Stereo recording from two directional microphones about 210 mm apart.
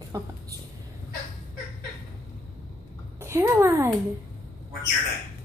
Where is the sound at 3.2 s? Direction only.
15° right (ahead or behind).